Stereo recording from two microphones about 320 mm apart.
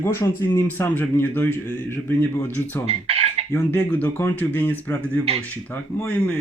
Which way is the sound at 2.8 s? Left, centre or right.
Centre.